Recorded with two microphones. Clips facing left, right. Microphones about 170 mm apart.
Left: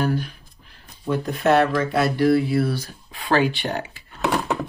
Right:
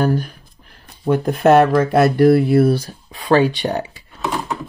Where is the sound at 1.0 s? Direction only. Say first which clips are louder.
Right 6 dB; 55° right (ahead or behind).